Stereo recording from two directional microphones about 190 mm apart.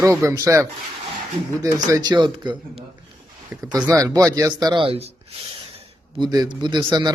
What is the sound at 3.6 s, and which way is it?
Speech, 15° right (ahead or behind).